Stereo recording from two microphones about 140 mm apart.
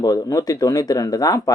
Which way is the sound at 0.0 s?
25° left (ahead or behind).